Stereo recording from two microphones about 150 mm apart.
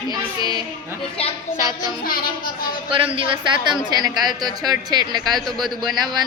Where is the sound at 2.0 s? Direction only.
70° left (ahead or behind).